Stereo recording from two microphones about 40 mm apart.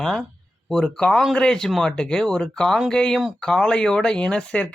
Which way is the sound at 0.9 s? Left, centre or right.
Centre.